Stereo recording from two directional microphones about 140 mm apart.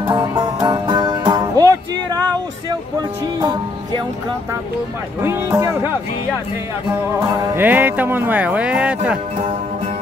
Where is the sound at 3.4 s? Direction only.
30° right (ahead or behind).